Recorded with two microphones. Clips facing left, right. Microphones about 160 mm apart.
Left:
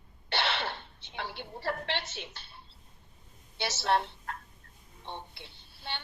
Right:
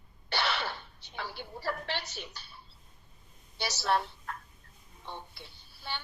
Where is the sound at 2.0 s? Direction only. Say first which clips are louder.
Left 1 dB; 25° left (ahead or behind).